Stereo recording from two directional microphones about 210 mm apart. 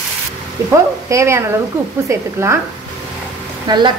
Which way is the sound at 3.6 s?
20° right (ahead or behind).